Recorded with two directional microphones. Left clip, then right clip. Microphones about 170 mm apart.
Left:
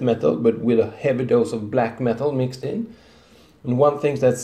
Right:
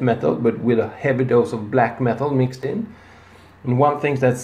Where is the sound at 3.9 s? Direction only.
15° left (ahead or behind).